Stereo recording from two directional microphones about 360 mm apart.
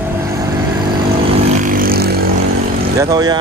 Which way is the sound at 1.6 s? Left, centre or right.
Right.